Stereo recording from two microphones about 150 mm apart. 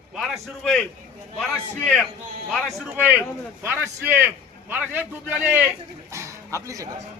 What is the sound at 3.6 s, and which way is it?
A man's voice, 15° right (ahead or behind).